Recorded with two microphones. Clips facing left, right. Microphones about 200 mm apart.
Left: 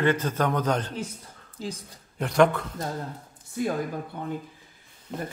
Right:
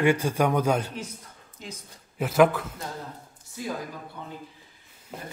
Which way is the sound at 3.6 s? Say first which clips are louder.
Left 7 dB; 55° left (ahead or behind).